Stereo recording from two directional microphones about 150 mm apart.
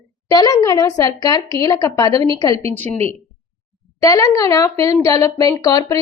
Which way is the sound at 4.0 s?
20° left (ahead or behind).